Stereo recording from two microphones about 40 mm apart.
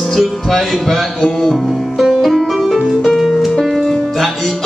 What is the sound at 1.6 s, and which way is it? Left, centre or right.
Music, centre.